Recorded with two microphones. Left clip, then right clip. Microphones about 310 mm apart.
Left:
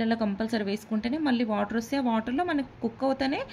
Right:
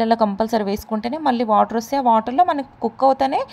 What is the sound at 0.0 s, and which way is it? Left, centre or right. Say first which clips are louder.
A woman's voice: right 12 dB; right.